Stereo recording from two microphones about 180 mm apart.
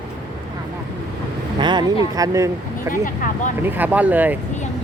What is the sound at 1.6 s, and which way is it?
Speech, 25° right (ahead or behind).